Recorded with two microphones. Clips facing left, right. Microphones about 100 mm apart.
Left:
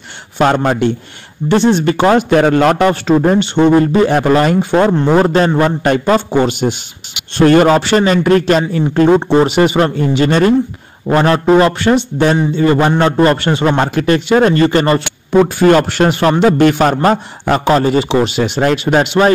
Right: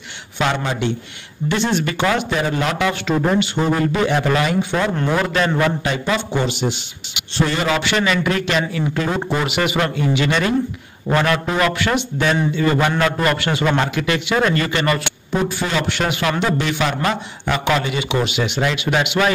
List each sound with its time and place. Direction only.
0.4 s a man's voice: 45° left (ahead or behind)
1.5 s a man's voice: 35° left (ahead or behind)
2.4 s a man's voice: 60° left (ahead or behind)
7.7 s a man's voice: 40° left (ahead or behind)
15.4 s a man's voice: 50° left (ahead or behind)